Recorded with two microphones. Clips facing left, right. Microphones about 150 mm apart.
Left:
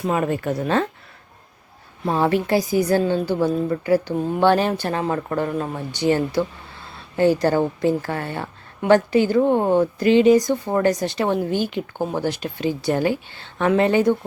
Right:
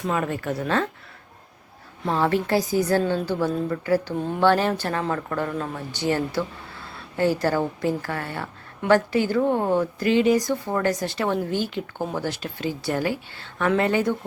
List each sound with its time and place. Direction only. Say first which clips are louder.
0.1 s a woman's voice: left 4 dB; 20° left (ahead or behind)
2.0 s a woman's voice: left 3 dB; 15° left (ahead or behind)